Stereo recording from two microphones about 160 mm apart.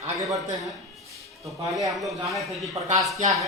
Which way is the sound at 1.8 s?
Centre (ahead or behind).